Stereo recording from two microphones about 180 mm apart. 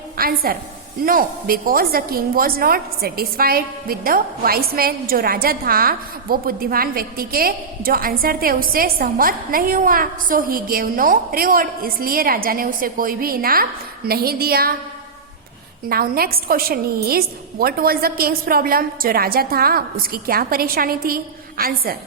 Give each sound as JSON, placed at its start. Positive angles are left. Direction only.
{"t": 0.2, "sound": "a woman's voice", "side_deg": -55}
{"t": 15.9, "sound": "a woman's voice", "side_deg": -55}